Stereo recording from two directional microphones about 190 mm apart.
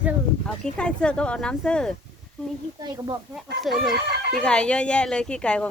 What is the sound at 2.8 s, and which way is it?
Speech, 20° right (ahead or behind).